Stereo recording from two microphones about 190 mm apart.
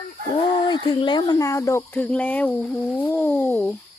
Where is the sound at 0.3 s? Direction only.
25° left (ahead or behind).